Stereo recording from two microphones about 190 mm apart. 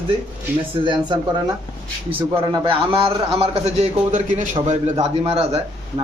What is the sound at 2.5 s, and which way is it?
A man's voice, 30° right (ahead or behind).